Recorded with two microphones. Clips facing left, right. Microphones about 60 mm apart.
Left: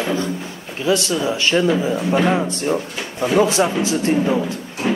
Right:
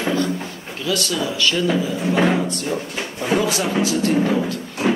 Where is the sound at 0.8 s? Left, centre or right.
Left.